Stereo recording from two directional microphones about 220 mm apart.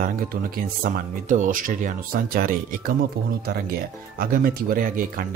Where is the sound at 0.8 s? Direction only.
40° right (ahead or behind).